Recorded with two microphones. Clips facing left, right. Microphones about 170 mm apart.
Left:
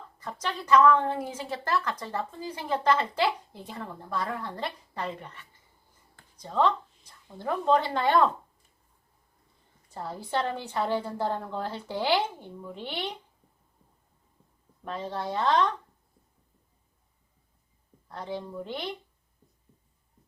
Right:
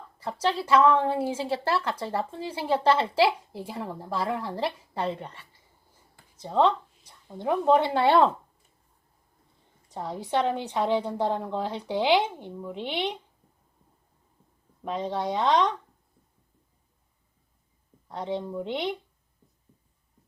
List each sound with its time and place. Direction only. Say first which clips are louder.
0.4 s speech: even; 30° right (ahead or behind)
3.6 s a woman's voice: right 4 dB; 10° right (ahead or behind)
3.8 s a woman's voice: right 3 dB; 25° right (ahead or behind)
8.0 s speech: right 3 dB; 30° right (ahead or behind)
9.9 s a woman's voice: right 3 dB; 15° right (ahead or behind)
14.8 s speech: right 4 dB; 20° right (ahead or behind)
18.1 s speech: right 5 dB; 25° right (ahead or behind)